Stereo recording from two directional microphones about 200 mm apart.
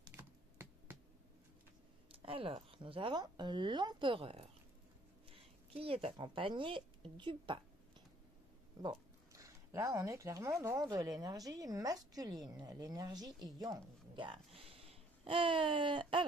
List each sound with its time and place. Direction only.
0.0 s computer keyboard: 10° right (ahead or behind)
2.2 s a woman's voice: 30° right (ahead or behind)
8.8 s speech: 15° right (ahead or behind)